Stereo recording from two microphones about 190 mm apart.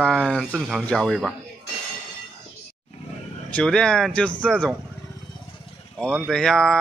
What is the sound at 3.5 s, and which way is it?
A man's voice, 5° left (ahead or behind).